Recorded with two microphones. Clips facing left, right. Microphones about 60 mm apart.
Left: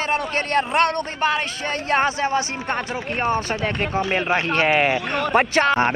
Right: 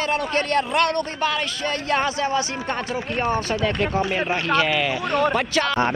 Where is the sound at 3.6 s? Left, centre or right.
Left.